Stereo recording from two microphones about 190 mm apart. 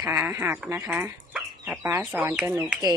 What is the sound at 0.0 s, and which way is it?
Speech, 10° right (ahead or behind).